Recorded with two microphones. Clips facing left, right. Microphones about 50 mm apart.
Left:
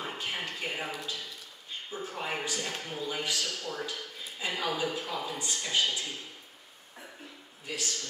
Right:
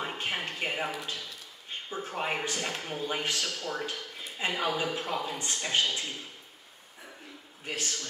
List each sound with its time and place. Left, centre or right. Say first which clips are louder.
0.0 s a sound: right 2 dB; right
1.9 s a man's voice: right 3 dB; right
7.6 s a man's voice: right 1 dB; right